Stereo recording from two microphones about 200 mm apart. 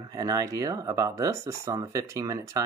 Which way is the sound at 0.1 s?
20° right (ahead or behind).